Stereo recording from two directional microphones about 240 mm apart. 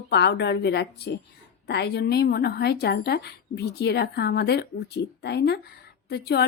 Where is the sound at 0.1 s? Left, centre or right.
Left.